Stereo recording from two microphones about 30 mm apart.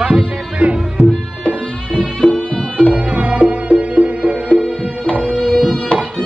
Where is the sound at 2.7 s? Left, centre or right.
Right.